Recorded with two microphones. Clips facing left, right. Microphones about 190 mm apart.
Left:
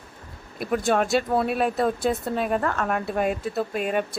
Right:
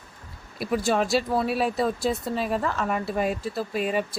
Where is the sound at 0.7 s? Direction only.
Centre (ahead or behind).